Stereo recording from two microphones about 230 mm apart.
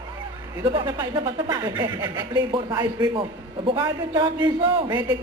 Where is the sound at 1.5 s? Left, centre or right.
Centre.